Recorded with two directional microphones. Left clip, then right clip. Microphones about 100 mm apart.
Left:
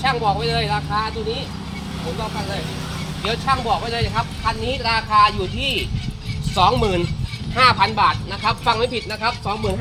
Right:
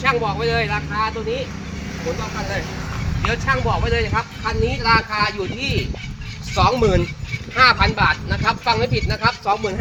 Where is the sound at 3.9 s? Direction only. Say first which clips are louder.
Right 2 dB; 40° left (ahead or behind).